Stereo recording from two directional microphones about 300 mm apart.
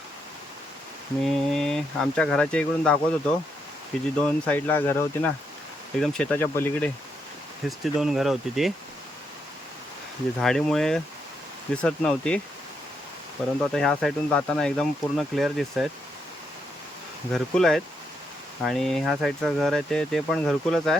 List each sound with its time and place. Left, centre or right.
1.2 s speech: centre
10.4 s speech: centre
13.7 s speech: centre
17.3 s speech: centre